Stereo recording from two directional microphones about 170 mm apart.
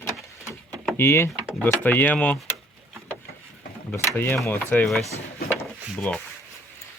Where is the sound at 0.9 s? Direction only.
15° left (ahead or behind).